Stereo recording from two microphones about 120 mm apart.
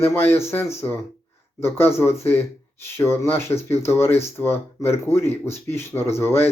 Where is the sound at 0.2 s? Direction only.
20° left (ahead or behind).